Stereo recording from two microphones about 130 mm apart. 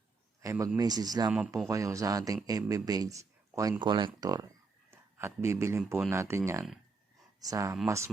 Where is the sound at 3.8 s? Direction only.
40° right (ahead or behind).